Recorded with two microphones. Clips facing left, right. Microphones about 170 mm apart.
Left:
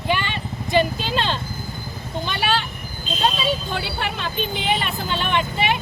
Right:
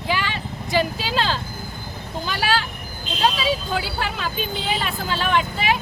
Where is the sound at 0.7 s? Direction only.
5° right (ahead or behind).